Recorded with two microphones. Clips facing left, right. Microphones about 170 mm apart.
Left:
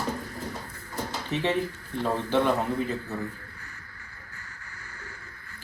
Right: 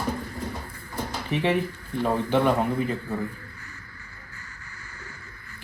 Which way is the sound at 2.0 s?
10° right (ahead or behind).